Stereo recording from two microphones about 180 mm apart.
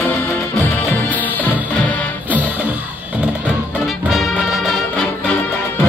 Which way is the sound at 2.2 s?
10° right (ahead or behind).